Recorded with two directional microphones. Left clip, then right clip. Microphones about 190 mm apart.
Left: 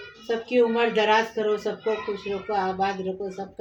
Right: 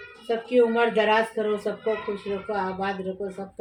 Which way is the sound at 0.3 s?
15° left (ahead or behind).